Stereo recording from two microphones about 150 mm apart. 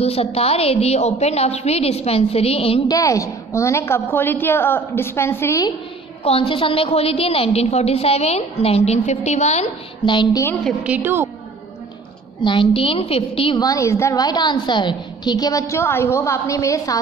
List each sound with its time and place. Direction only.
0.0 s a woman's voice: 40° left (ahead or behind)
2.9 s a woman's voice: 20° left (ahead or behind)
6.2 s a woman's voice: 40° left (ahead or behind)
10.0 s a woman's voice: 30° left (ahead or behind)
10.8 s a woman's voice: 10° right (ahead or behind)
12.4 s a woman's voice: 35° left (ahead or behind)
13.6 s a woman's voice: 20° left (ahead or behind)